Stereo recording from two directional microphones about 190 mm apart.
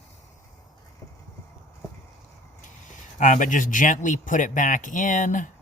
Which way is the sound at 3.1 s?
40° left (ahead or behind).